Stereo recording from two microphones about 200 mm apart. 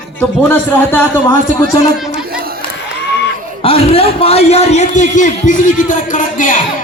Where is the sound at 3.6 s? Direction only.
30° left (ahead or behind).